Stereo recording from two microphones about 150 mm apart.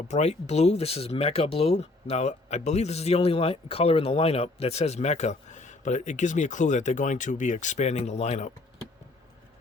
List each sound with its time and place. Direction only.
0.1 s speech: 45° left (ahead or behind)